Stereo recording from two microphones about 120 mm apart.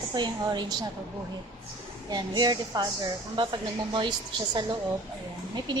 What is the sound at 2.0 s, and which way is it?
A woman's voice, 35° right (ahead or behind).